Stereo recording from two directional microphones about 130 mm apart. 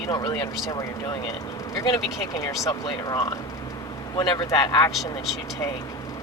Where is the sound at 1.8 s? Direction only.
30° left (ahead or behind).